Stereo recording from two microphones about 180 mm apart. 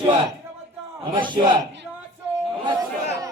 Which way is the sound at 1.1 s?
25° right (ahead or behind).